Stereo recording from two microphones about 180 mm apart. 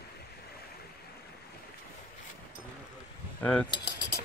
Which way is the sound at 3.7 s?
25° left (ahead or behind).